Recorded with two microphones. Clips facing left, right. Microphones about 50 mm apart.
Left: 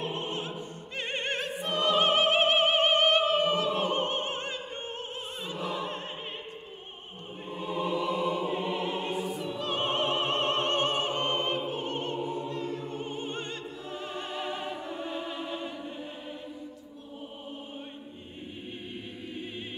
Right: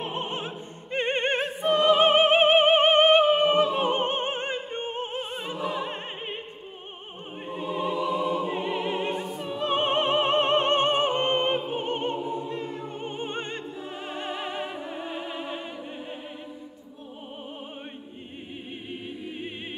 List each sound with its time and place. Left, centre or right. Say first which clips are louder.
0.0 s music: right 2 dB; right
1.6 s opera: right 7 dB; centre
5.6 s opera: right 3 dB; centre
5.9 s opera: right 3 dB; right
7.5 s opera: right 2 dB; centre
9.5 s opera: right 8 dB; right